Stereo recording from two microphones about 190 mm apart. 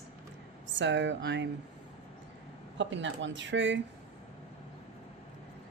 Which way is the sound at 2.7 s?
75° right (ahead or behind).